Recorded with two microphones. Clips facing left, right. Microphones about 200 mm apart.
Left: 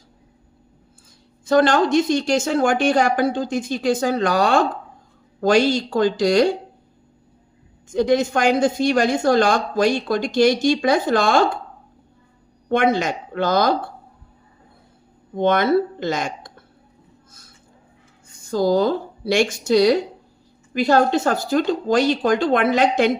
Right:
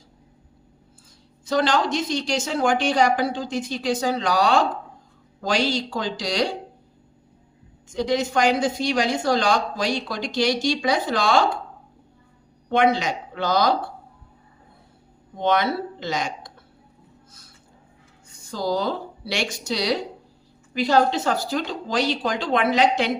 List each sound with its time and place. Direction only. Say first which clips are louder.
1.5 s speech: left 6 dB; 50° left (ahead or behind)
7.9 s speech: left 4 dB; 50° left (ahead or behind)
12.6 s speech: left 2 dB; 50° left (ahead or behind)
15.4 s speech: left 5 dB; 50° left (ahead or behind)
18.5 s speech: left 7 dB; 50° left (ahead or behind)